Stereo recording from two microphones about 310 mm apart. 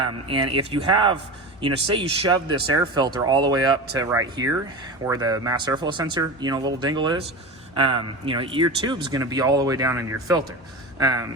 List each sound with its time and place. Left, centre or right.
0.0 s speech: centre